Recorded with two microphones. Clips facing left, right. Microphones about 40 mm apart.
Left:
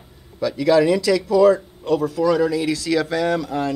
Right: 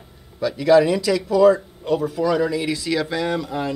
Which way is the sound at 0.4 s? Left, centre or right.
Centre.